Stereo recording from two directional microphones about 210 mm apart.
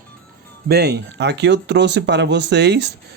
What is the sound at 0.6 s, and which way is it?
Speech, 50° right (ahead or behind).